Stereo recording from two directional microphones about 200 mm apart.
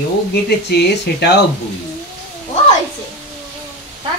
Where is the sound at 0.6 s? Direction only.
55° left (ahead or behind).